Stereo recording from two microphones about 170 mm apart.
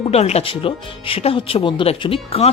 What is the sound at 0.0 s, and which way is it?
Speech, 40° left (ahead or behind).